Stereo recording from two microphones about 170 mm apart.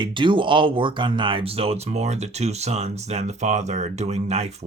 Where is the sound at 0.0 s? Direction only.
30° right (ahead or behind).